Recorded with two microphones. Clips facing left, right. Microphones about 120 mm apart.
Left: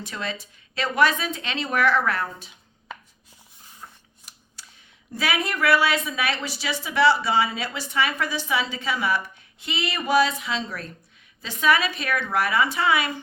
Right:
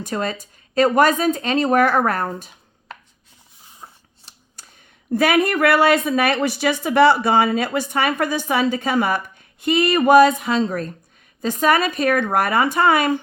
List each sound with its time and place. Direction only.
0.0 s a woman's voice: 45° right (ahead or behind)
4.3 s camera: 30° right (ahead or behind)
5.1 s a woman's voice: 50° right (ahead or behind)